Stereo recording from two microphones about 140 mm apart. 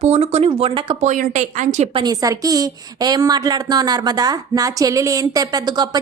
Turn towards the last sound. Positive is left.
turn(degrees=-30)  # may be behind; listen again after turning